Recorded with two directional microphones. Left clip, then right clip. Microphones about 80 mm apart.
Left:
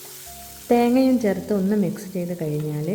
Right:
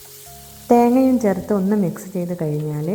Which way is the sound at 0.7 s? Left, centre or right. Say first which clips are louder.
Right 4 dB; centre.